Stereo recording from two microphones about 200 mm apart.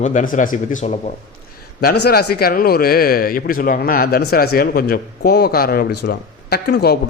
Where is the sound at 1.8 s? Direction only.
50° left (ahead or behind).